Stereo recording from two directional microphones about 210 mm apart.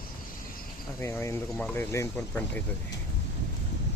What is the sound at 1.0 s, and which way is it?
Speech, 10° left (ahead or behind).